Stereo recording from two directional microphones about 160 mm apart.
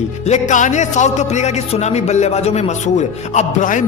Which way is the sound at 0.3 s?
50° left (ahead or behind).